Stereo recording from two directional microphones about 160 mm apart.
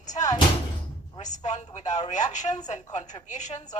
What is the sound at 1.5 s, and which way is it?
Speech, 45° left (ahead or behind).